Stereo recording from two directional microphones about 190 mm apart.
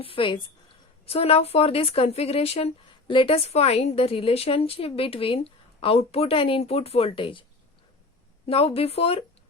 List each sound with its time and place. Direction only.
0.0 s a woman's voice: 30° left (ahead or behind)
8.4 s speech: 30° left (ahead or behind)